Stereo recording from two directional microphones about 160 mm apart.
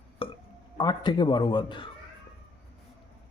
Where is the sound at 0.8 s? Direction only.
30° left (ahead or behind).